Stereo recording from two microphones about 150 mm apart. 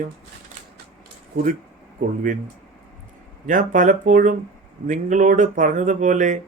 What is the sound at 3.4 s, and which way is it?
Speech, 60° right (ahead or behind).